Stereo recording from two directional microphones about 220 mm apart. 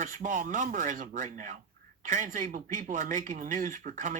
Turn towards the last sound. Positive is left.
turn(degrees=-35)  # may be behind; listen again after turning